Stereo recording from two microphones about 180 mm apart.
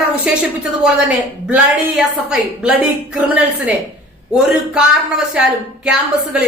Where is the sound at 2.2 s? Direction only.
5° right (ahead or behind).